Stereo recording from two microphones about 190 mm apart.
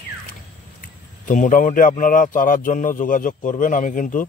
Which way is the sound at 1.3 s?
45° left (ahead or behind).